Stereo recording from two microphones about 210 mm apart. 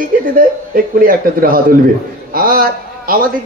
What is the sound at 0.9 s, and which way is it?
A man's voice, 45° right (ahead or behind).